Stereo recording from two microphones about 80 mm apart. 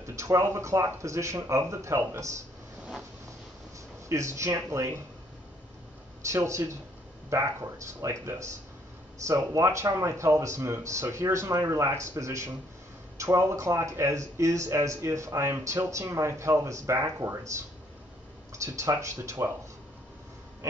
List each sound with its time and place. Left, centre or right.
0.0 s a sound: right
0.6 s speech: right
4.1 s speech: right
6.2 s speech: right